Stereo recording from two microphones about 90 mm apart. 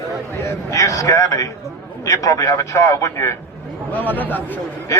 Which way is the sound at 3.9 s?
20° left (ahead or behind).